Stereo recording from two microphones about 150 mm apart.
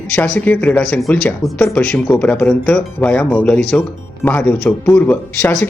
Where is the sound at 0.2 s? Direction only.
10° left (ahead or behind).